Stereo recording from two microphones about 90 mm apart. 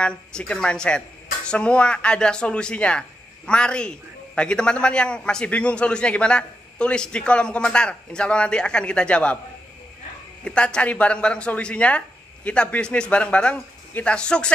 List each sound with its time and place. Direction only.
0.0 s speech: 10° left (ahead or behind)
10.4 s speech: 10° left (ahead or behind)